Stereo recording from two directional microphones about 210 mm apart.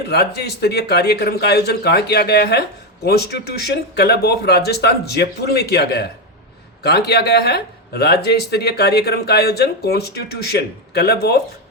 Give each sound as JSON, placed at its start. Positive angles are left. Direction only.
{"t": 0.1, "sound": "a man's voice", "side_deg": 50}